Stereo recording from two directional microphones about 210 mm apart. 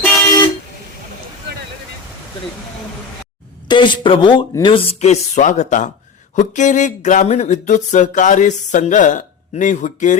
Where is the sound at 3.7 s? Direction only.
20° left (ahead or behind).